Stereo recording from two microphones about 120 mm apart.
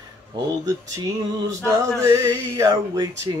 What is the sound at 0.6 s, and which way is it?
Speech, 30° right (ahead or behind).